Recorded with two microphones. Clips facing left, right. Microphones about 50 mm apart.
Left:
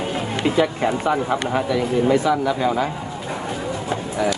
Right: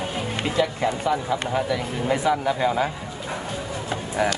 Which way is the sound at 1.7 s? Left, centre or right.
Centre.